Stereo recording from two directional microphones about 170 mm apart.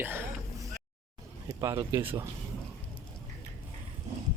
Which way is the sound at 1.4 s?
15° right (ahead or behind).